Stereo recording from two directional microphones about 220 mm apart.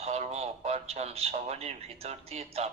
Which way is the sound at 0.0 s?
30° right (ahead or behind).